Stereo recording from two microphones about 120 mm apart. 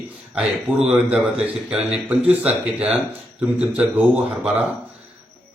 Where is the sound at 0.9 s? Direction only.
5° right (ahead or behind).